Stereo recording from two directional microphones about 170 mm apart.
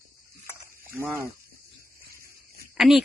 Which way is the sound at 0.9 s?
15° right (ahead or behind).